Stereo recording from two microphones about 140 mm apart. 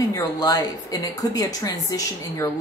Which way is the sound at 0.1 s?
25° left (ahead or behind).